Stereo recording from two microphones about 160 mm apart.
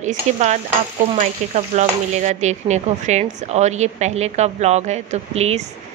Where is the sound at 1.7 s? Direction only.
45° right (ahead or behind).